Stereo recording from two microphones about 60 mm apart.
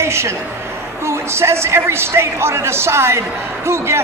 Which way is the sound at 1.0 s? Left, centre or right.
Right.